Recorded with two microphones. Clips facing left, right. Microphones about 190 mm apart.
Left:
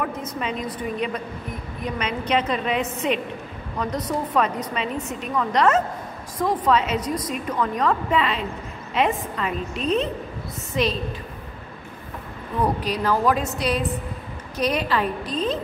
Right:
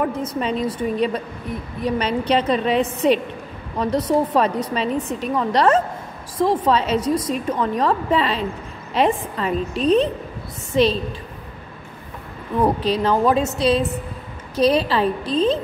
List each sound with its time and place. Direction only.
0.0 s a woman's voice: 35° right (ahead or behind)
12.6 s a woman's voice: 25° right (ahead or behind)